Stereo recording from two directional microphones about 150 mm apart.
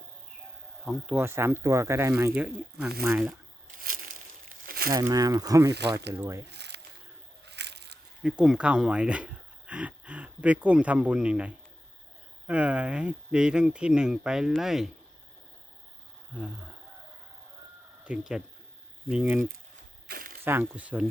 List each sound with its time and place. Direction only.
0.9 s speech: 10° right (ahead or behind)
3.8 s a sound: 70° right (ahead or behind)
4.9 s speech: 25° right (ahead or behind)
8.2 s speech: 5° right (ahead or behind)
18.0 s speech: 5° right (ahead or behind)
20.1 s a sound: 85° right
20.4 s speech: 15° right (ahead or behind)